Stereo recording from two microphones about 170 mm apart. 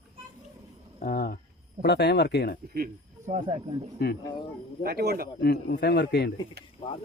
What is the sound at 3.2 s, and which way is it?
Speech, 40° right (ahead or behind).